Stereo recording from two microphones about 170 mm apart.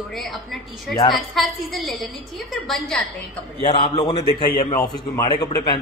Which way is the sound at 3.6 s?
25° left (ahead or behind).